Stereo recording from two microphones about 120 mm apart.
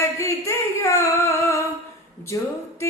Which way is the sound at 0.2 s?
25° left (ahead or behind).